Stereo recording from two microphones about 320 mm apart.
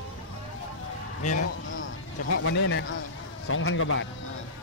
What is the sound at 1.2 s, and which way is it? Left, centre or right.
A man's voice, left.